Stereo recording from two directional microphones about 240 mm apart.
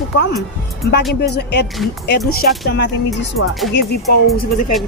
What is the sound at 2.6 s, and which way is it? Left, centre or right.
Speech, left.